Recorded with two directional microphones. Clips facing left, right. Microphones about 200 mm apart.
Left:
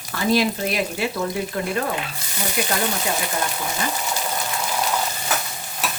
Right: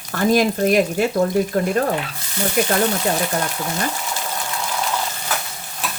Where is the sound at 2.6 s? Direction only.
50° right (ahead or behind).